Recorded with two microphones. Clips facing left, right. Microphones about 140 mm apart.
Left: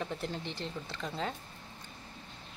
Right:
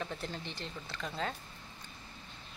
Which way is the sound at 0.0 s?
15° left (ahead or behind).